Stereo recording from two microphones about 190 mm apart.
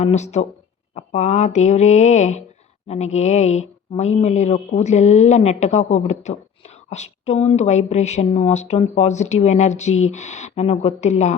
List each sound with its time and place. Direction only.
0.0 s speech: 35° left (ahead or behind)